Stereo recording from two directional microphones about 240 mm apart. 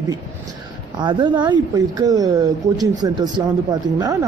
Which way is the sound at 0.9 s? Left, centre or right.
Centre.